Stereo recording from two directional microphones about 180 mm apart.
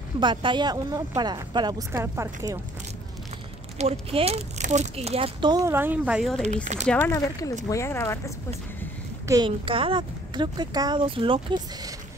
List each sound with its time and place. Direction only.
0.2 s speech: 25° right (ahead or behind)
4.1 s speech: 35° right (ahead or behind); by 6.4 s centre (ahead or behind)
6.4 s speech: 40° right (ahead or behind)
6.9 s speech: 15° left (ahead or behind)
9.3 s speech: 25° right (ahead or behind)